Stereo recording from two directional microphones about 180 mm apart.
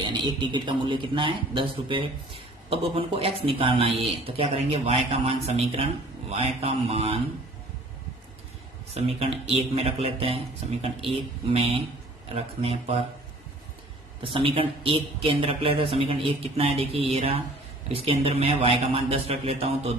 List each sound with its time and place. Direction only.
0.0 s speech: 25° right (ahead or behind)
9.0 s speech: 35° right (ahead or behind)
14.2 s speech: 30° right (ahead or behind)